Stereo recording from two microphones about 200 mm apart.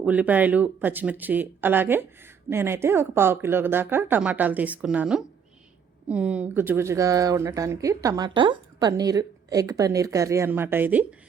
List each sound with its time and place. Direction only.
0.0 s speech: 5° right (ahead or behind)